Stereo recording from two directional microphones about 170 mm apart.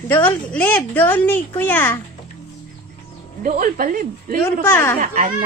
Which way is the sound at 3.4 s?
55° right (ahead or behind).